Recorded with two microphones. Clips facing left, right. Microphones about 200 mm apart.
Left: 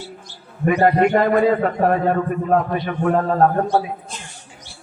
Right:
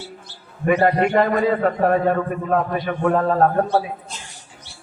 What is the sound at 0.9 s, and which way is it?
A man's voice, 50° left (ahead or behind).